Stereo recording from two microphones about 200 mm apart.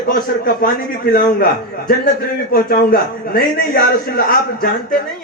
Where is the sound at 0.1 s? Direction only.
45° left (ahead or behind).